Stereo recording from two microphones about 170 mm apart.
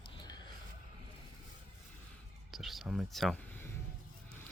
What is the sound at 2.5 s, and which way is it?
Speech, centre (ahead or behind).